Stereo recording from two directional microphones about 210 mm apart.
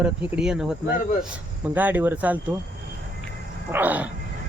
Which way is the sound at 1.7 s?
10° right (ahead or behind).